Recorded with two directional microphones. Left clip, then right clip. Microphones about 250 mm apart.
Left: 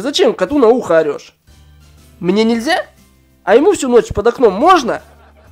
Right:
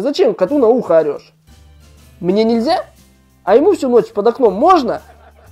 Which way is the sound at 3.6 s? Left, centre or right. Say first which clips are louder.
Left 1 dB; centre.